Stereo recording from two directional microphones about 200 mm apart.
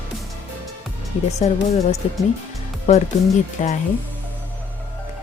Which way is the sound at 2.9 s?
35° left (ahead or behind).